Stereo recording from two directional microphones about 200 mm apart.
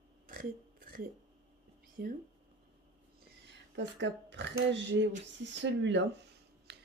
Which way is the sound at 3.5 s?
65° right (ahead or behind).